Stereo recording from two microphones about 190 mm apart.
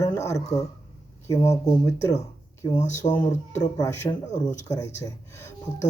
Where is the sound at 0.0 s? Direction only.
15° left (ahead or behind).